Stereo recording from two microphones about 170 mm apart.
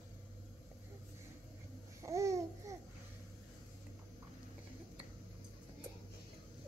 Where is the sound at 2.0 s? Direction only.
20° right (ahead or behind).